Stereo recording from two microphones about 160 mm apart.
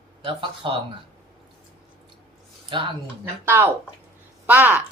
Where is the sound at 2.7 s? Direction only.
30° right (ahead or behind).